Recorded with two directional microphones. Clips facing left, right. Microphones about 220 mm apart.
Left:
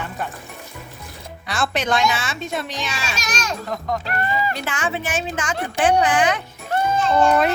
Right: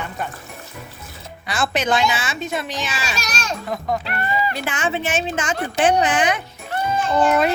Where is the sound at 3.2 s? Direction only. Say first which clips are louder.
Left 1 dB; 35° right (ahead or behind).